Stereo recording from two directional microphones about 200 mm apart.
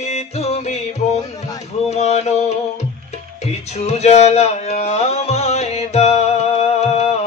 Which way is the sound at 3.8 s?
35° left (ahead or behind).